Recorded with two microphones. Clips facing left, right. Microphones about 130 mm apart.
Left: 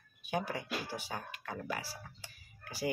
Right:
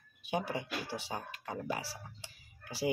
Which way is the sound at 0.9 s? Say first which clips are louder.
Right 1 dB; 25° right (ahead or behind).